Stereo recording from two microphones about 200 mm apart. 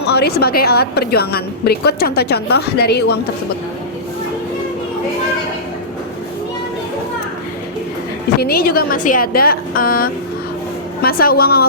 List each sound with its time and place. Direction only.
0.0 s a woman's voice: 55° left (ahead or behind)
8.4 s a woman's voice: 50° left (ahead or behind)